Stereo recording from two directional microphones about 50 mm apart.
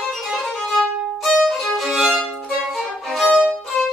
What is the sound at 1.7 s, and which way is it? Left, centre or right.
Music, centre.